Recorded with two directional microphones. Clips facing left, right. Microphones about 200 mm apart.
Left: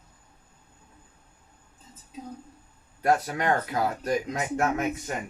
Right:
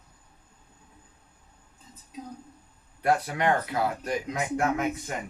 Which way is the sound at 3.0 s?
45° left (ahead or behind).